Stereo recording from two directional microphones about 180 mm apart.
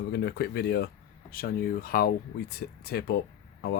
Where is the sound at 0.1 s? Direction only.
65° left (ahead or behind).